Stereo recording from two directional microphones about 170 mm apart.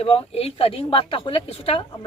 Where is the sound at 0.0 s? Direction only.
35° left (ahead or behind).